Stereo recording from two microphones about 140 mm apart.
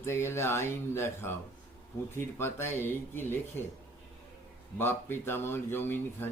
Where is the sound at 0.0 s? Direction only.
20° left (ahead or behind).